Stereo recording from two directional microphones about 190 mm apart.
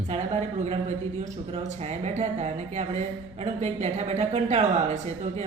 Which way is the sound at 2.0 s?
35° right (ahead or behind).